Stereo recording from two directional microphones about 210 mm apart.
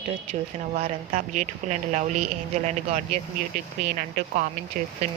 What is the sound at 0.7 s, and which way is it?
Speech, 35° right (ahead or behind).